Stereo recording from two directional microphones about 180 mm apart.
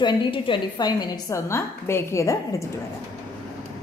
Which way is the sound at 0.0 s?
30° left (ahead or behind).